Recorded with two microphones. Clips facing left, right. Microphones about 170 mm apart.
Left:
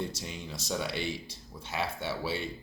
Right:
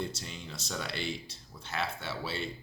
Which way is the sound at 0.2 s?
10° left (ahead or behind).